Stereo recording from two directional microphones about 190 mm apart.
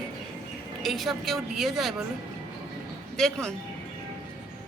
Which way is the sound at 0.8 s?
Centre (ahead or behind).